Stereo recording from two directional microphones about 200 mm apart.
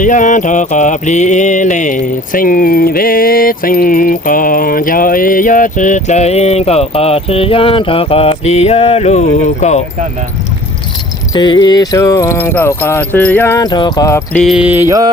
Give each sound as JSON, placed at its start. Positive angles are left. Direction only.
{"t": 0.0, "sound": "mantra", "side_deg": 40}
{"t": 11.3, "sound": "a sound", "side_deg": 20}
{"t": 14.3, "sound": "mantra", "side_deg": 0}